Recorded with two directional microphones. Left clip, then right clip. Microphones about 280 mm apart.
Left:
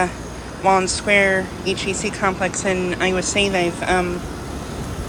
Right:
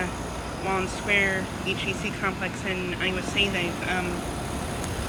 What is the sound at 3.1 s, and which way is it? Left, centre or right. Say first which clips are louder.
Speech: left 5 dB; left.